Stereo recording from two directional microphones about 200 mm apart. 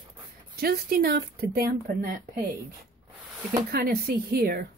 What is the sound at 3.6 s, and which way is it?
Speech, 50° right (ahead or behind).